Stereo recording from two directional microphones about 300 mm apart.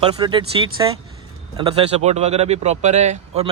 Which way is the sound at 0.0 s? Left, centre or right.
Centre.